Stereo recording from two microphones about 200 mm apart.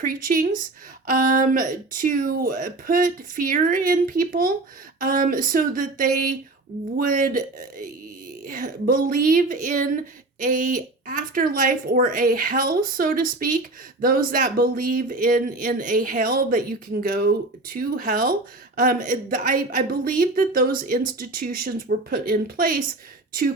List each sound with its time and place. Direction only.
0.0 s speech: 45° right (ahead or behind)